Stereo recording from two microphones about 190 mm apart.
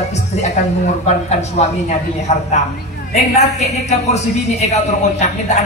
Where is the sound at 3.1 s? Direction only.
35° left (ahead or behind).